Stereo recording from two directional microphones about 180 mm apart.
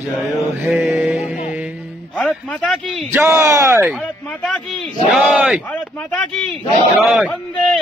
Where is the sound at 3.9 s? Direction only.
Centre (ahead or behind).